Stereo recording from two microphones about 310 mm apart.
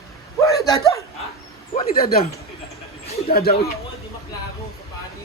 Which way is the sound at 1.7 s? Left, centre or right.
Left.